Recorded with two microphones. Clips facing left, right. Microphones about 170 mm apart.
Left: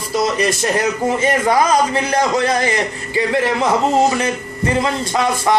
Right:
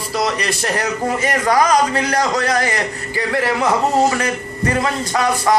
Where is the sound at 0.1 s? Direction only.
20° left (ahead or behind).